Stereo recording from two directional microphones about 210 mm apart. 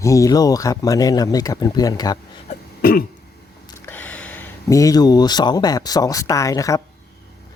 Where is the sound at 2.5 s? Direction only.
45° left (ahead or behind).